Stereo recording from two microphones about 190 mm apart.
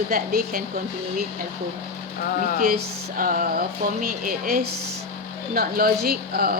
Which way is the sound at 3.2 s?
45° right (ahead or behind).